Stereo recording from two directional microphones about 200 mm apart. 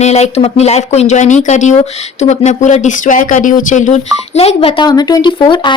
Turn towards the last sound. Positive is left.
turn(degrees=25)  # may be behind; listen again after turning